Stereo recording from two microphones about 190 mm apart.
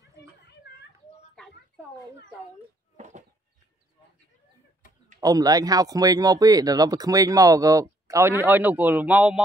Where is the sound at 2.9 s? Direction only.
40° right (ahead or behind).